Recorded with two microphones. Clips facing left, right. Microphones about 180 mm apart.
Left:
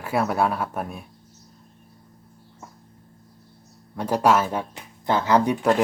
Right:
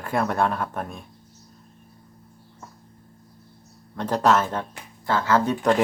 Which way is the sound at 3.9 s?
10° left (ahead or behind).